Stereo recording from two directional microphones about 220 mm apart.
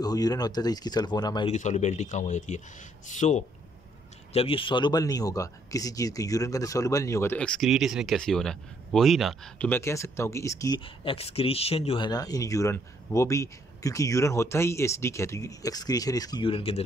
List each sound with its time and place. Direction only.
0.0 s speech: 15° left (ahead or behind)
1.5 s speech: 30° left (ahead or behind)